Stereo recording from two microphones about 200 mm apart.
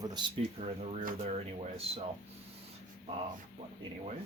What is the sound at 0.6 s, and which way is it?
Speech, 35° right (ahead or behind).